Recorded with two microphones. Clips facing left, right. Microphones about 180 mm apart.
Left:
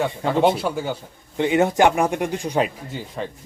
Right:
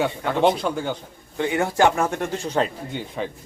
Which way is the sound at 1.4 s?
20° left (ahead or behind).